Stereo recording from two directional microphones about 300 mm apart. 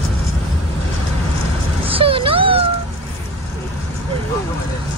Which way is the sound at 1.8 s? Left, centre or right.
Centre.